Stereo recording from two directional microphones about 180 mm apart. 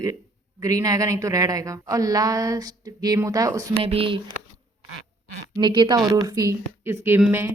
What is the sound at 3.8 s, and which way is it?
Speech, 30° right (ahead or behind).